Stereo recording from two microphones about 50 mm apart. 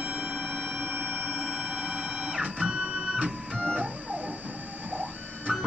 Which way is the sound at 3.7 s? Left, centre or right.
Right.